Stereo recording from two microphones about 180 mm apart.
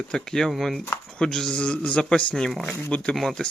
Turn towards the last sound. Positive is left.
turn(degrees=0)  # may be behind; listen again after turning